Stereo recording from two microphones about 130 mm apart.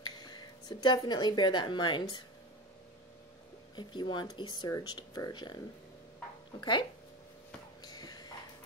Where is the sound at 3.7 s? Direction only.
35° left (ahead or behind).